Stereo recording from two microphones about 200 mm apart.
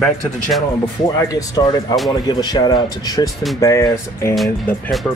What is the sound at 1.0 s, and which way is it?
Speech, 15° left (ahead or behind).